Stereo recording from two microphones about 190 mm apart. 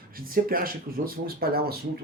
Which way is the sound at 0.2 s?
50° right (ahead or behind).